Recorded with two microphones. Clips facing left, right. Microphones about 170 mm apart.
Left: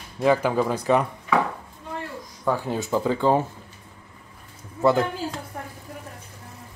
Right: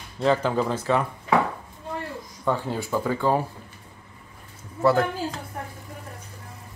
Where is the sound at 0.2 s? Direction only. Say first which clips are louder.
Left 2 dB; 10° left (ahead or behind).